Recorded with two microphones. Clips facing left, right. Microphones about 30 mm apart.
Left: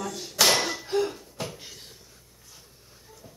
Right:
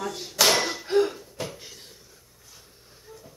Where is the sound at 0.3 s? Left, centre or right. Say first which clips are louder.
Right 1 dB; centre.